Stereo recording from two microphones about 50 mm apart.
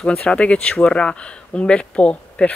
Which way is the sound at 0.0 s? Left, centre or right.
Centre.